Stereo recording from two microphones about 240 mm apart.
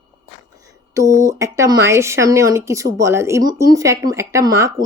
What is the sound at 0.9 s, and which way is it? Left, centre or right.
Speech, centre.